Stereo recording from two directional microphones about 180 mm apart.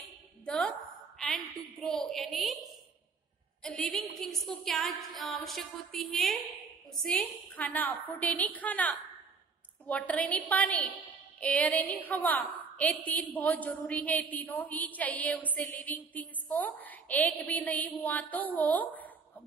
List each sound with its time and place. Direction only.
0.5 s a woman's voice: 5° left (ahead or behind)
3.6 s a woman's voice: 5° left (ahead or behind)